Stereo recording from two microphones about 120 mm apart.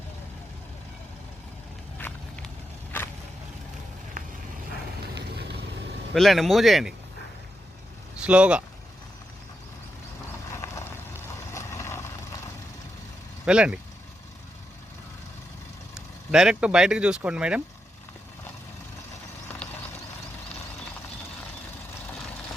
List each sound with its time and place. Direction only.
2.0 s run: 10° left (ahead or behind)
4.2 s vehicle: 90° right
6.1 s speech: centre (ahead or behind)
8.2 s speech: 10° right (ahead or behind)
10.5 s clip-clop: 25° left (ahead or behind)
11.5 s vehicle: 25° left (ahead or behind)
13.4 s speech: 10° right (ahead or behind)
16.0 s speech: 5° right (ahead or behind)